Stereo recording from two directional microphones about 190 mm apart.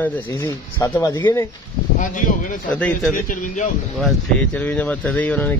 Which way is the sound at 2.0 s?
45° left (ahead or behind).